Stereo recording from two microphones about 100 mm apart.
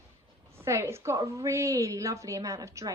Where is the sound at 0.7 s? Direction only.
30° right (ahead or behind).